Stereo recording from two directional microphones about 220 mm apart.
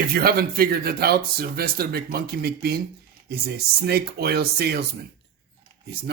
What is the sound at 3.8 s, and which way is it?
Speech, 45° right (ahead or behind).